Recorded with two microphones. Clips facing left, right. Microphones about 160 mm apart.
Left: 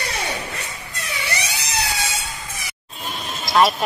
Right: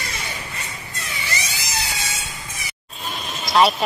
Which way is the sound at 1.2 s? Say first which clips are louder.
Left 2 dB; 65° left (ahead or behind).